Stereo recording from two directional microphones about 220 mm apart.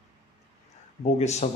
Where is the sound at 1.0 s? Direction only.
30° left (ahead or behind).